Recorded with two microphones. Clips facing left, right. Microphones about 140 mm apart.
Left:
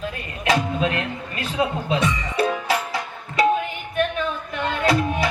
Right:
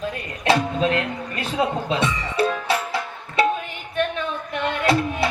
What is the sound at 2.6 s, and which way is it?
Music, 30° right (ahead or behind).